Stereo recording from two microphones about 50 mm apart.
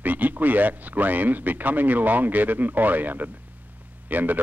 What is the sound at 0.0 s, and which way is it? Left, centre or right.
Speech, right.